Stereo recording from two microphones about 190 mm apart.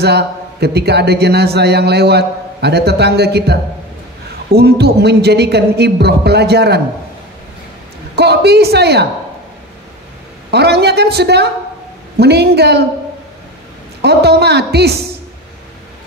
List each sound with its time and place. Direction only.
0.0 s a man's voice: 60° right (ahead or behind)
8.2 s a man's voice: 60° right (ahead or behind)
10.5 s a man's voice: 60° right (ahead or behind)
14.0 s a man's voice: 60° right (ahead or behind)